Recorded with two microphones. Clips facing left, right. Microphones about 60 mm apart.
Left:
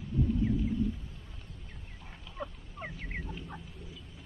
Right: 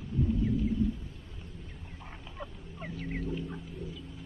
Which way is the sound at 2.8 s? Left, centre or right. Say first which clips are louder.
Right 3 dB; centre.